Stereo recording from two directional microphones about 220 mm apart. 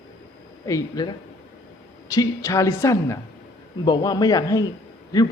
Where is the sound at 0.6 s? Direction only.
15° left (ahead or behind).